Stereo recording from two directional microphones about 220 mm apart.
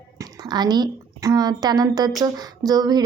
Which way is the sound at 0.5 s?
20° right (ahead or behind).